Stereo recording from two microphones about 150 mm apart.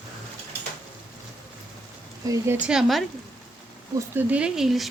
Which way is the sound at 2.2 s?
25° right (ahead or behind).